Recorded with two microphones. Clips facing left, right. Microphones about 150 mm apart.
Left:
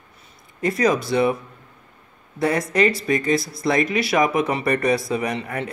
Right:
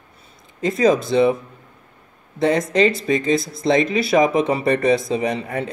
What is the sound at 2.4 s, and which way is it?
Speech, 25° right (ahead or behind).